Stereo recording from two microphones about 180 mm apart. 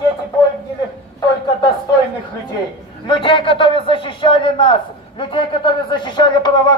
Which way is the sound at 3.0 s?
25° left (ahead or behind).